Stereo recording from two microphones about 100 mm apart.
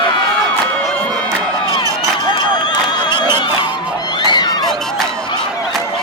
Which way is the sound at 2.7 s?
50° left (ahead or behind).